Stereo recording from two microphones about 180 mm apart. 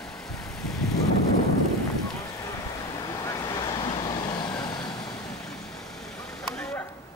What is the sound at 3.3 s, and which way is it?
Vehicle, 20° left (ahead or behind).